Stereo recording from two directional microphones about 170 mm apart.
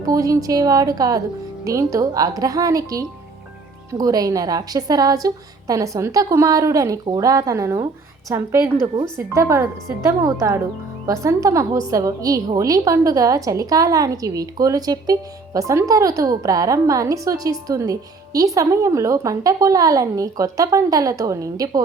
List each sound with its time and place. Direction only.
0.0 s a woman's voice: 20° right (ahead or behind)